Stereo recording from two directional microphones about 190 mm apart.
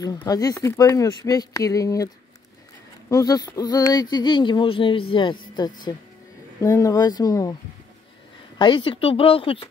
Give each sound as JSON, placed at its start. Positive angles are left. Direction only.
{"t": 0.0, "sound": "speech", "side_deg": 20}
{"t": 3.1, "sound": "speech", "side_deg": 20}
{"t": 8.5, "sound": "speech", "side_deg": 25}